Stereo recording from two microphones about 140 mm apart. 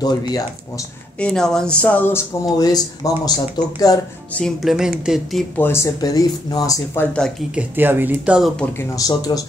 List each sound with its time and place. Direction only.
1.2 s speech: 5° left (ahead or behind)
2.4 s speech: 30° left (ahead or behind)
4.3 s speech: 5° left (ahead or behind)
5.6 s speech: 15° left (ahead or behind)
7.2 s speech: 5° left (ahead or behind)
7.5 s speech: 15° right (ahead or behind)
8.9 s speech: 25° left (ahead or behind)